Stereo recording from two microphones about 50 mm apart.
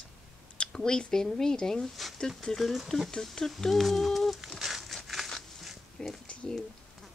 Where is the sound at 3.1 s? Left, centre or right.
Centre.